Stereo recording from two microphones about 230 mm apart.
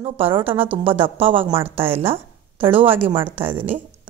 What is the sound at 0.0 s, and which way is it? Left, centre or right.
Speech, right.